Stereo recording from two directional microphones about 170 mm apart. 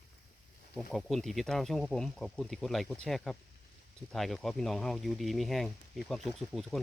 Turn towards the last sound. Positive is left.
turn(degrees=0)  # may be behind; listen again after turning